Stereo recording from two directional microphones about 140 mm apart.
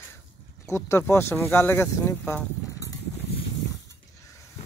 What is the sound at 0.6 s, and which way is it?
Speech, 20° left (ahead or behind).